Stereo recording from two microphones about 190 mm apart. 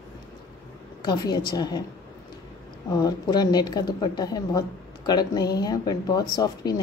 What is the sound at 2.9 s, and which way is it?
A woman's voice, 20° left (ahead or behind).